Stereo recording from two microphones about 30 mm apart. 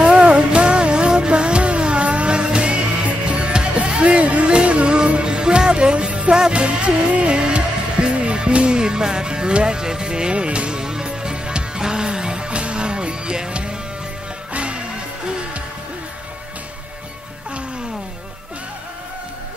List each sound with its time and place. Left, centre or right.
0.0 s music: right
4.0 s music: right
10.3 s music: right
10.8 s music: right
11.1 s music: right